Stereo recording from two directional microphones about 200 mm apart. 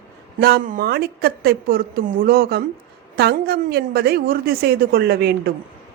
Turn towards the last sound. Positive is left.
turn(degrees=-50)  # may be behind; listen again after turning